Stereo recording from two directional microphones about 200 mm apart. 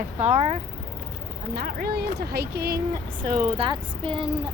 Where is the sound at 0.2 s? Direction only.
30° right (ahead or behind).